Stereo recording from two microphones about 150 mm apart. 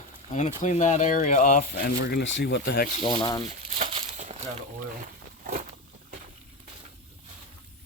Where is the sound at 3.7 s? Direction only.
45° right (ahead or behind).